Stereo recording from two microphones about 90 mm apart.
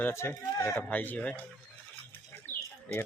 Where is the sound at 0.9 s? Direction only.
20° left (ahead or behind).